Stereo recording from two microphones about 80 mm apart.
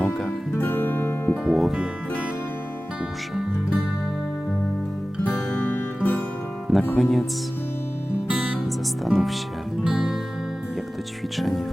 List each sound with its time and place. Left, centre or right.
0.0 s music: centre
0.5 s music: left
1.5 s speech: centre
5.7 s music: left
6.7 s music: centre
7.0 s speech: centre
8.3 s music: centre
9.0 s speech: centre
9.8 s music: centre
11.3 s speech: centre